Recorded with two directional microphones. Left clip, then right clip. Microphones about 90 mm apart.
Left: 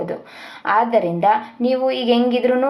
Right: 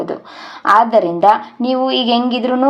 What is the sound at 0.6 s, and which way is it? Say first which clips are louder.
A woman's voice: right 6 dB; 10° right (ahead or behind).